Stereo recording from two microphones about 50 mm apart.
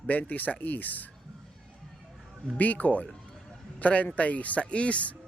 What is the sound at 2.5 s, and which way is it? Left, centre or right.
A man's voice, left.